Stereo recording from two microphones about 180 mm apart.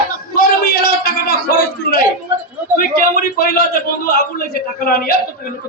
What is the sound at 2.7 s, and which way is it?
A man's voice, 55° left (ahead or behind).